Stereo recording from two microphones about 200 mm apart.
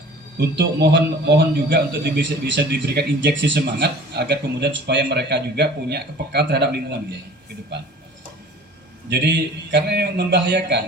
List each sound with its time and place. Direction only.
0.3 s a man's voice: 55° right (ahead or behind)
9.0 s a man's voice: 60° right (ahead or behind)